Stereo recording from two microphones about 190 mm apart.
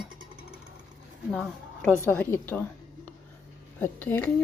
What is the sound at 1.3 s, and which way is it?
Speech, centre (ahead or behind).